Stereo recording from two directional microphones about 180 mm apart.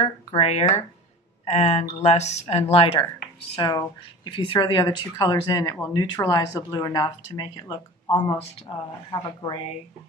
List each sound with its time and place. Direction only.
0.0 s speech: 35° left (ahead or behind)